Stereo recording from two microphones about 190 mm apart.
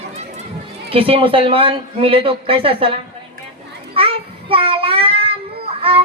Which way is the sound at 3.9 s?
30° right (ahead or behind).